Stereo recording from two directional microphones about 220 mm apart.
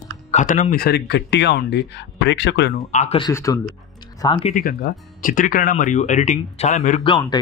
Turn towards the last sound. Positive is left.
turn(degrees=20)  # may be behind; listen again after turning